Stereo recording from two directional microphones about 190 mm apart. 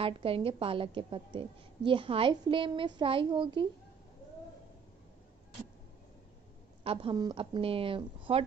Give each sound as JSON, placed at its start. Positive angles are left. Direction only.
{"t": 0.0, "sound": "a child's voice", "side_deg": -30}
{"t": 6.8, "sound": "a child's voice", "side_deg": -30}